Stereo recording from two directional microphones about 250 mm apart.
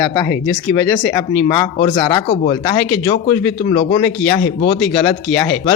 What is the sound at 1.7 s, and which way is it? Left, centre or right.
A man's voice, centre.